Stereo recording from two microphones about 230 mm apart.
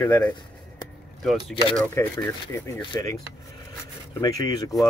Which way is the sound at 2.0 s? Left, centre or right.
Centre.